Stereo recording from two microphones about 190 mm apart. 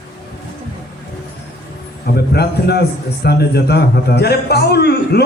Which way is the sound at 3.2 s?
60° left (ahead or behind).